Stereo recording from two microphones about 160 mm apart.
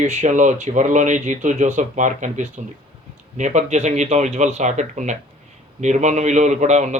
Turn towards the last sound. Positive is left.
turn(degrees=-45)  # may be behind; listen again after turning